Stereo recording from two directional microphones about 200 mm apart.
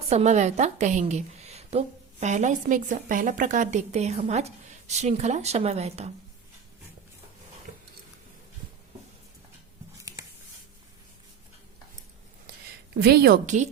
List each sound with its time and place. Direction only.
0.1 s a woman's voice: 35° right (ahead or behind)
10.0 s a sound: 15° right (ahead or behind)
13.0 s a woman's voice: 50° right (ahead or behind)